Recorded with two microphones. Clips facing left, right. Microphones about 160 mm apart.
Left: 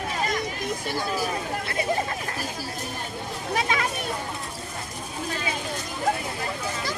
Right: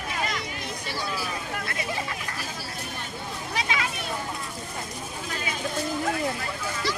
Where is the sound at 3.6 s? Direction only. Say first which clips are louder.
Left 3 dB; 45° left (ahead or behind).